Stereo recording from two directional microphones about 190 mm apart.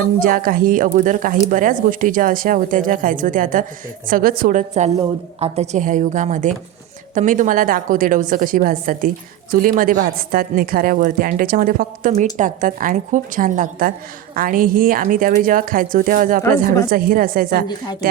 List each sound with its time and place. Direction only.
0.2 s a woman's voice: 45° right (ahead or behind)